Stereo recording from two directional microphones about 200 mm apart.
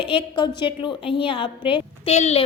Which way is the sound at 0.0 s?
25° left (ahead or behind).